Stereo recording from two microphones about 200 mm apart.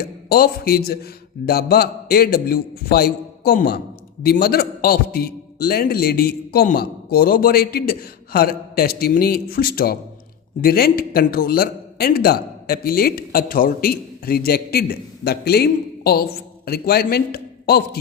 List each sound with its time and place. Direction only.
0.0 s a man's voice: 50° left (ahead or behind)